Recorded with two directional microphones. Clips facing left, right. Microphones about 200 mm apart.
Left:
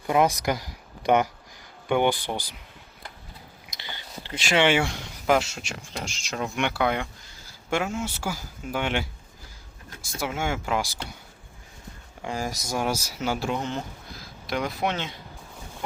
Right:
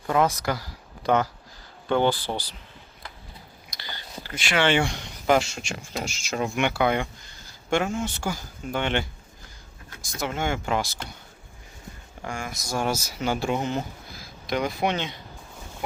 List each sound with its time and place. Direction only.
0.1 s speech: 15° left (ahead or behind)
3.8 s whispering: 20° left (ahead or behind)
4.5 s speech: 15° left (ahead or behind)
4.8 s speech: centre (ahead or behind)
10.2 s speech: 5° left (ahead or behind)
12.3 s speech: 35° left (ahead or behind)
12.6 s speech: 10° left (ahead or behind)
13.6 s a sound: 10° right (ahead or behind)
14.5 s speech: centre (ahead or behind)